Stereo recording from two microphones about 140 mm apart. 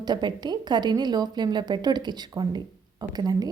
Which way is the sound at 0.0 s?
30° right (ahead or behind).